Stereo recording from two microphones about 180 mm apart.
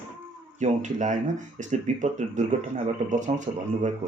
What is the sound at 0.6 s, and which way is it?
Speech, 40° right (ahead or behind).